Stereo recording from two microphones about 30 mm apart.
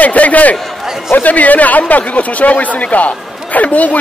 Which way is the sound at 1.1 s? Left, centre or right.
Left.